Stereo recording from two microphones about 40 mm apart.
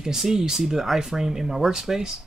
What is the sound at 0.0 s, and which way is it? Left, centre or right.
Speech, centre.